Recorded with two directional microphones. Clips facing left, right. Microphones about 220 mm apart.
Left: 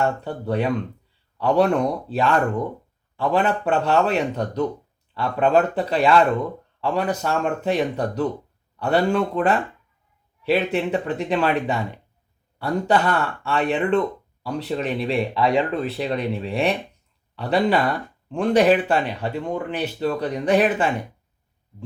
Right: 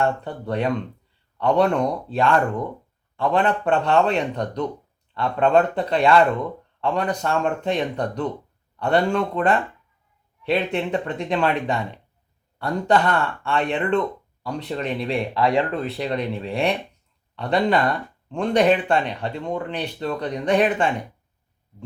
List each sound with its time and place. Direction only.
0.0 s speech: 5° left (ahead or behind)